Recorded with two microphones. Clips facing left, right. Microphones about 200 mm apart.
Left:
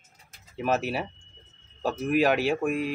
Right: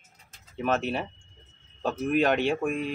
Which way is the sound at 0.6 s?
5° left (ahead or behind).